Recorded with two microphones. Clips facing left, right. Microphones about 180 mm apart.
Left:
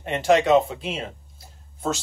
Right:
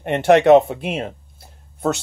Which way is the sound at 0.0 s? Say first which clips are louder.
Right 6 dB; 60° right (ahead or behind).